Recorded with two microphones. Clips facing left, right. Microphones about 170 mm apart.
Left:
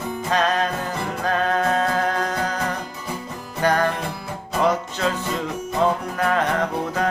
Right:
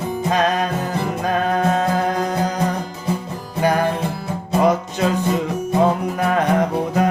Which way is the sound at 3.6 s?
10° right (ahead or behind).